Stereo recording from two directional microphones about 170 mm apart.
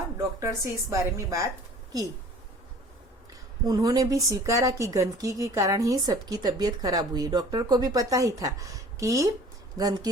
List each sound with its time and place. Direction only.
0.2 s speech: 15° right (ahead or behind)
3.7 s speech: 20° right (ahead or behind)